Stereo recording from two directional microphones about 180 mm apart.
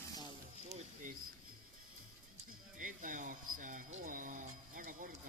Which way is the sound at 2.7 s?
45° right (ahead or behind).